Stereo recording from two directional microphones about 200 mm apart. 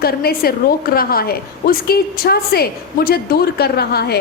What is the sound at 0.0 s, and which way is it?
A woman's voice, 50° left (ahead or behind).